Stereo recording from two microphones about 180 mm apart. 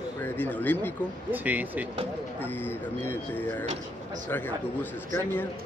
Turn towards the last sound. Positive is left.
turn(degrees=10)  # may be behind; listen again after turning